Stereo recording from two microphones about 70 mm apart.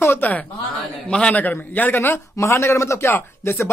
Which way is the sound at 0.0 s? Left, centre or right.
Left.